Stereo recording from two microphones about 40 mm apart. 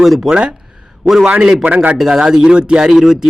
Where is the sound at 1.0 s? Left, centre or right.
Centre.